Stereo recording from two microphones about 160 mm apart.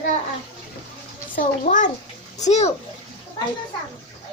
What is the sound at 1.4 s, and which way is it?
A child's voice, 50° left (ahead or behind).